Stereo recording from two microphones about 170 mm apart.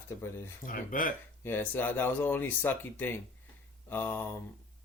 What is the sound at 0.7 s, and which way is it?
Speech, 55° left (ahead or behind).